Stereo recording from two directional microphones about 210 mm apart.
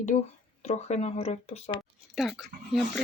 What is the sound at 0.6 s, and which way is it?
Speech, 30° left (ahead or behind).